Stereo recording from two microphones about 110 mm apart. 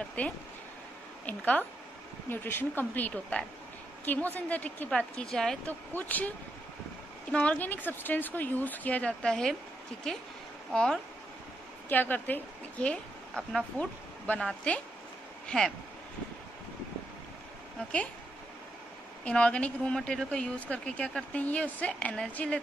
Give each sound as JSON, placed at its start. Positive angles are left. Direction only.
{"t": 0.2, "sound": "speech", "side_deg": 15}
{"t": 5.9, "sound": "speech", "side_deg": 15}
{"t": 7.3, "sound": "a woman's voice", "side_deg": 15}
{"t": 19.2, "sound": "speech", "side_deg": 10}